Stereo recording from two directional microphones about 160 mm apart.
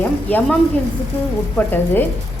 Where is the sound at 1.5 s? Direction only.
10° left (ahead or behind).